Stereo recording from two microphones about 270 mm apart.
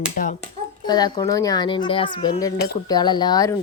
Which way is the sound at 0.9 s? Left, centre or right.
Centre.